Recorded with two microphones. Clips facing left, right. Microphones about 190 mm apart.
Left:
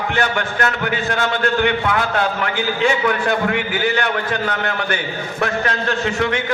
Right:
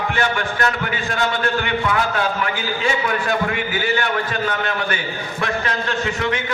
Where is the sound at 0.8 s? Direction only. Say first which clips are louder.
Left 2 dB; 60° left (ahead or behind).